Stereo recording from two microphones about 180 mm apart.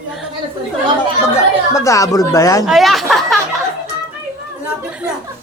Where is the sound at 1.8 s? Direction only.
15° left (ahead or behind).